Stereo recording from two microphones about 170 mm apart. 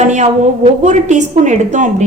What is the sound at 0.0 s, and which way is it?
A woman's voice, 45° right (ahead or behind).